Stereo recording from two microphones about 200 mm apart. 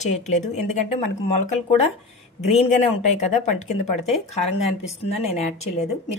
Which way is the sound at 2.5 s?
35° left (ahead or behind).